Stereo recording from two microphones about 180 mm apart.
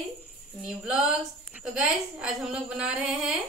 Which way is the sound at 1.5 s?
5° right (ahead or behind).